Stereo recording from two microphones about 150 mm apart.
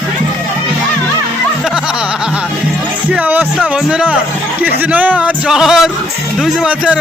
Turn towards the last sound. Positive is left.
turn(degrees=-5)  # may be behind; listen again after turning